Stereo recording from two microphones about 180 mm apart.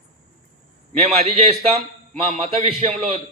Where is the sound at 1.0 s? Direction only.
35° right (ahead or behind).